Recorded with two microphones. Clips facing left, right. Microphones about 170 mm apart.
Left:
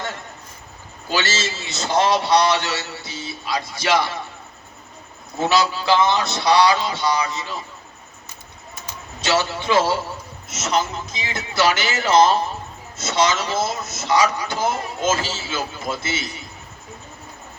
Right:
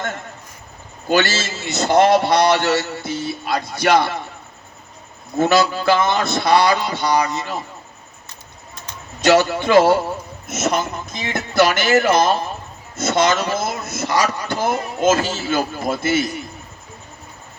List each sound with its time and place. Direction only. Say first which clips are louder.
1.0 s speech: right 5 dB; 55° right (ahead or behind)
5.4 s speech: right 4 dB; 55° right (ahead or behind)
9.2 s speech: right 7 dB; 50° right (ahead or behind)